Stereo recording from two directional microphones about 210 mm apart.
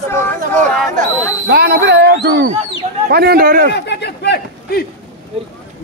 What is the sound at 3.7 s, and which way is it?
A man's voice, 55° left (ahead or behind).